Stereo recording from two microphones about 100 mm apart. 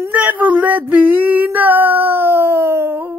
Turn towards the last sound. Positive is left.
turn(degrees=-20)  # may be behind; listen again after turning